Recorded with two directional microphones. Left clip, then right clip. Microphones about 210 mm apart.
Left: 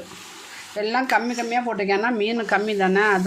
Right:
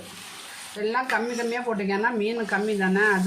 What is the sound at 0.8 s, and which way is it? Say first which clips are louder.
Speech: left 4 dB; 55° left (ahead or behind).